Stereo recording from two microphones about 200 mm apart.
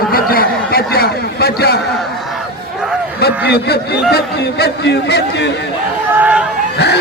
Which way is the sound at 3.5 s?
55° left (ahead or behind).